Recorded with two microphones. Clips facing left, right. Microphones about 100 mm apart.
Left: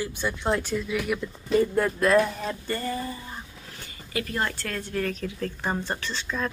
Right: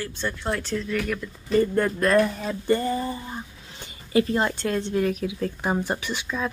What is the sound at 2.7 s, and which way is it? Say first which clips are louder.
Speech: right 10 dB; 20° right (ahead or behind).